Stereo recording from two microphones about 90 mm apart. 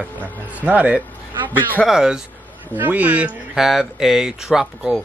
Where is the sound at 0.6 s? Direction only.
15° right (ahead or behind).